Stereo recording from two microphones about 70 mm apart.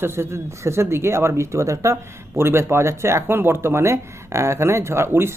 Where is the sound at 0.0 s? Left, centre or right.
Right.